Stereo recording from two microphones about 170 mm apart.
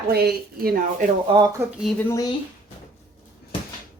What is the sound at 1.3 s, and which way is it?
Speech, 25° right (ahead or behind).